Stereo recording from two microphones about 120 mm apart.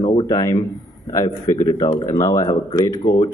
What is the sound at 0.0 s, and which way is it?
Speech, 35° left (ahead or behind).